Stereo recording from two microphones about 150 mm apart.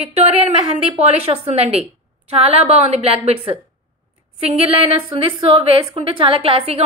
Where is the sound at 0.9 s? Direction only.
45° right (ahead or behind).